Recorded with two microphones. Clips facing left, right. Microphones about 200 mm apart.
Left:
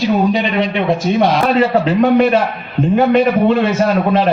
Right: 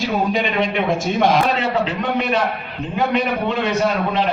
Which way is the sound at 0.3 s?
50° right (ahead or behind).